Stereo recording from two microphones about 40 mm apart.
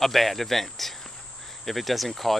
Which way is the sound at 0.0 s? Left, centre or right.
Centre.